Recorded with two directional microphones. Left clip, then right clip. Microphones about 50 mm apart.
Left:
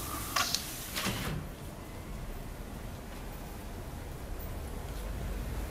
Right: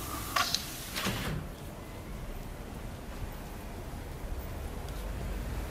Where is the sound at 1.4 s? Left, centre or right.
Centre.